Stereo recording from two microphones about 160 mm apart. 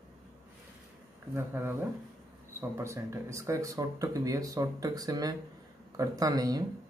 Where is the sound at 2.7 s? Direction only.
20° right (ahead or behind).